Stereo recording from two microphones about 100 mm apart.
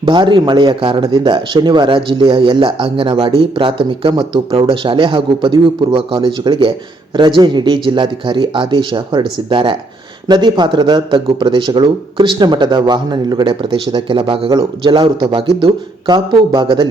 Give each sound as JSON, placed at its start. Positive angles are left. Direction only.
{"t": 0.0, "sound": "a man's voice", "side_deg": -50}
{"t": 14.5, "sound": "speech", "side_deg": -50}